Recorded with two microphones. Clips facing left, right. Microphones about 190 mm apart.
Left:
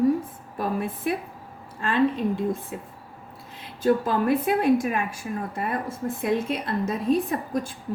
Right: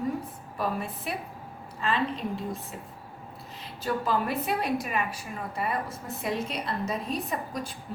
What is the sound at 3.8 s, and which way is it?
A woman's voice, 50° left (ahead or behind).